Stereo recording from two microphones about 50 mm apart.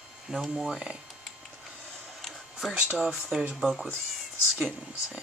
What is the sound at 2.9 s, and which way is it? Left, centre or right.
Speech, centre.